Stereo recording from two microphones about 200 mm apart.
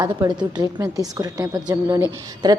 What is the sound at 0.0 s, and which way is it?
A woman's voice, 20° right (ahead or behind).